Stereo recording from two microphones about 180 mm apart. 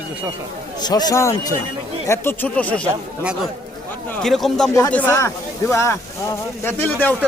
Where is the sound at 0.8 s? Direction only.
20° left (ahead or behind).